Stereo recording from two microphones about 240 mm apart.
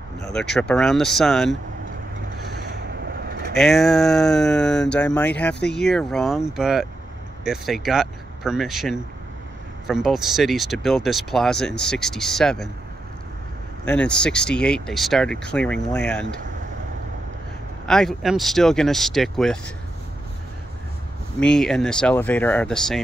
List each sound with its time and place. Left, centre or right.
0.3 s speech: centre
2.9 s vehicle: right
3.5 s speech: centre
13.8 s speech: centre
17.8 s speech: centre
21.4 s speech: centre